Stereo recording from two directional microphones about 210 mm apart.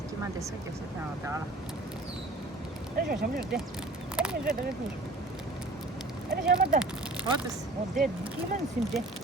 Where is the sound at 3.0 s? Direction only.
45° right (ahead or behind).